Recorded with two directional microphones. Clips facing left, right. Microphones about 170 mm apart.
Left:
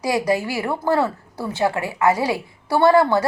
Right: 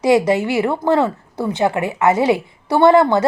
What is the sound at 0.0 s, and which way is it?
Speech, 25° right (ahead or behind).